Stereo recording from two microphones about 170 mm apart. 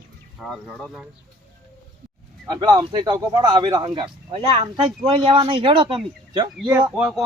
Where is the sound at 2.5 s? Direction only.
25° right (ahead or behind).